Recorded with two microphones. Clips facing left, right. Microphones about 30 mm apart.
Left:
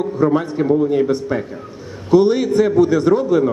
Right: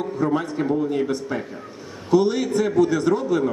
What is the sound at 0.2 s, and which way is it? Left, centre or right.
Speech, left.